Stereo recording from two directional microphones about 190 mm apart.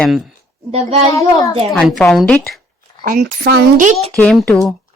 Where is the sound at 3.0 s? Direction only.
55° right (ahead or behind).